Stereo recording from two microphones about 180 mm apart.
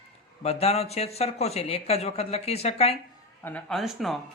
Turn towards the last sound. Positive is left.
turn(degrees=0)  # may be behind; listen again after turning